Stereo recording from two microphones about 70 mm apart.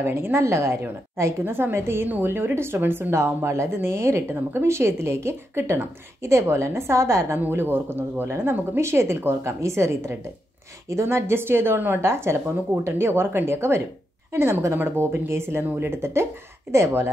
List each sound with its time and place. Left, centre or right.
0.0 s a woman's voice: right
1.4 s a woman's voice: right
7.3 s a woman's voice: right